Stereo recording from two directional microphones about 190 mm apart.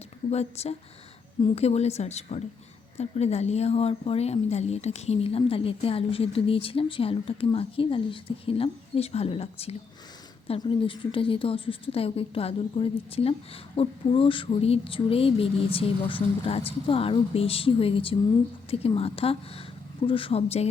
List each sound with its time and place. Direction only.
0.3 s a woman's voice: 35° left (ahead or behind)